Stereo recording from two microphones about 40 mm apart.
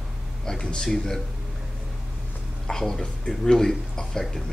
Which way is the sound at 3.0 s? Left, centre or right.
Centre.